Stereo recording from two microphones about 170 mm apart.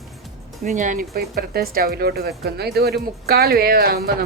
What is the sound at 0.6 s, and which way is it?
A man's voice, 45° right (ahead or behind).